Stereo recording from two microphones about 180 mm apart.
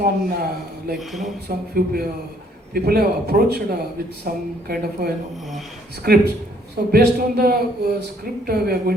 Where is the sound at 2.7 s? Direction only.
60° right (ahead or behind).